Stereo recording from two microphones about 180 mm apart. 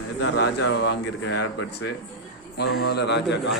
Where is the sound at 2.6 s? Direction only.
65° left (ahead or behind).